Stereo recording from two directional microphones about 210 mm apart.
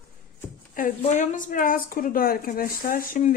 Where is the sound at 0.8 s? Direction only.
35° left (ahead or behind).